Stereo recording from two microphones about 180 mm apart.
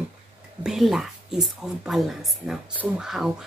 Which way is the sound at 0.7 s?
Centre (ahead or behind).